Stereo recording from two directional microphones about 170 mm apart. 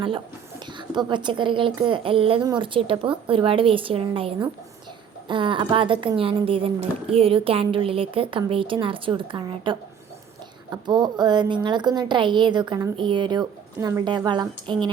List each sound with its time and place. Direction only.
0.6 s a woman's voice: 25° right (ahead or behind)